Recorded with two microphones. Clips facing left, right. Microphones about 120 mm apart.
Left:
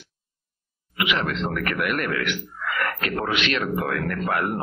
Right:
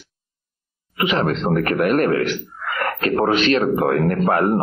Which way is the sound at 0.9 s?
35° right (ahead or behind).